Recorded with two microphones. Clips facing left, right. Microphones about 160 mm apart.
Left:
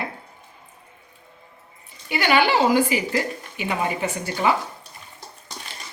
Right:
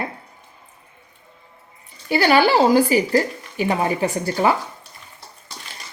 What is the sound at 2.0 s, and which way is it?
Speech, 40° right (ahead or behind).